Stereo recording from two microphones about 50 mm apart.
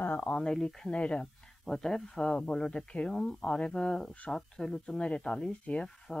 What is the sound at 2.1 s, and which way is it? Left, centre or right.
Speech, centre.